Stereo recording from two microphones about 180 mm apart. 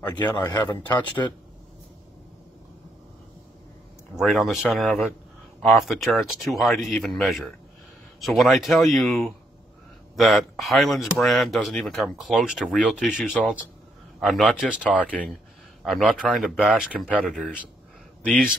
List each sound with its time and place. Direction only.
0.4 s a man's voice: 25° left (ahead or behind)
4.2 s speech: centre (ahead or behind)
18.3 s a man's voice: 50° right (ahead or behind)